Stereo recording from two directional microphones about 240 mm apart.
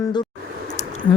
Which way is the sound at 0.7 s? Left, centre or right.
Left.